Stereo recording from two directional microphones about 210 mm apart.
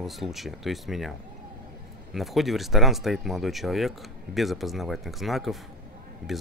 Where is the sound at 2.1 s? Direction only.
Centre (ahead or behind).